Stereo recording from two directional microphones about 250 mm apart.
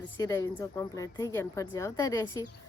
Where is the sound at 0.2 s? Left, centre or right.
Centre.